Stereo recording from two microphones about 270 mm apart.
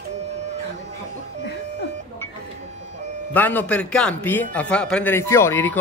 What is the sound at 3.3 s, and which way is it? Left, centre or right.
A man's voice, centre.